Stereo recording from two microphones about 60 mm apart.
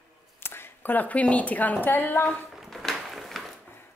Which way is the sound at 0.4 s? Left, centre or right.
Left.